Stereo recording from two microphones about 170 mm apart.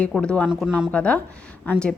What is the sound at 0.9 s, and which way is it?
Speech, 5° left (ahead or behind).